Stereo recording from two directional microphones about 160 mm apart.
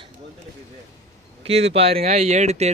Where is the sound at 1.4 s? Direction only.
40° right (ahead or behind).